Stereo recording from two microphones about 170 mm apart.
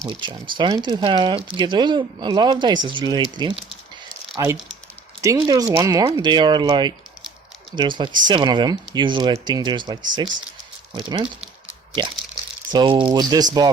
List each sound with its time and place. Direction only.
0.1 s speech: 30° right (ahead or behind)
12.7 s speech: 30° right (ahead or behind)